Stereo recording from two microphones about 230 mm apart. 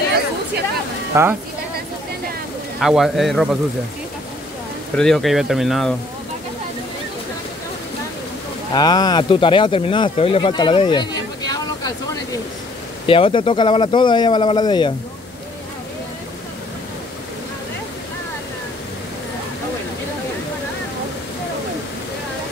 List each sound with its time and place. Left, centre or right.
1.1 s speech: centre
2.8 s speech: centre
4.9 s speech: centre
8.7 s speech: centre
13.0 s speech: left